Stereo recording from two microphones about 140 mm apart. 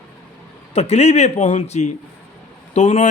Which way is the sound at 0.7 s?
50° left (ahead or behind).